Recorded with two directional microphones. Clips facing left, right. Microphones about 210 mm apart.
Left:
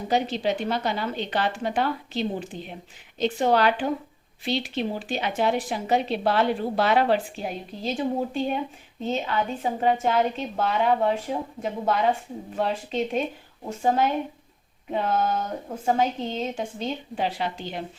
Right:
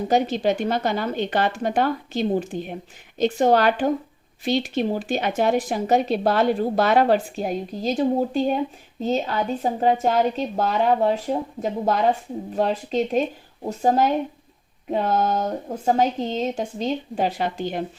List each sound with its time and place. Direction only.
0.1 s a woman's voice: 45° right (ahead or behind)